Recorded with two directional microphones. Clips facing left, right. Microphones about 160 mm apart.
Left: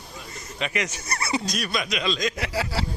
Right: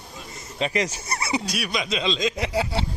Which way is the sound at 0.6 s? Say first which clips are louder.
Right 4 dB; 30° right (ahead or behind).